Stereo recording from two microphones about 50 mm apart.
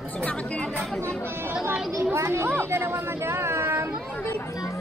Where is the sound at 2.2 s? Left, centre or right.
Right.